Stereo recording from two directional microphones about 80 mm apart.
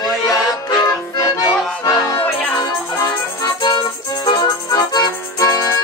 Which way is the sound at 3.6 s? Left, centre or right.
Left.